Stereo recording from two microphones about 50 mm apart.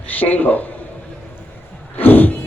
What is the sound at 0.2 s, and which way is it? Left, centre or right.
Speech, left.